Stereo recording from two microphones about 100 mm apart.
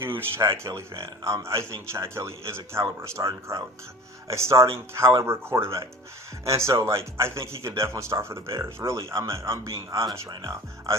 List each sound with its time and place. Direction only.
0.0 s speech: 20° right (ahead or behind)